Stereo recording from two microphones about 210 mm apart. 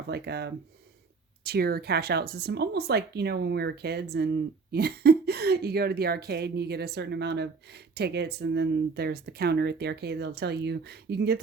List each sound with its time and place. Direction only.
0.1 s a woman's voice: 50° right (ahead or behind)